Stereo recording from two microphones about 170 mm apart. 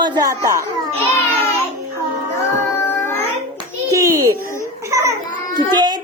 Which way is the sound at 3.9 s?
20° right (ahead or behind).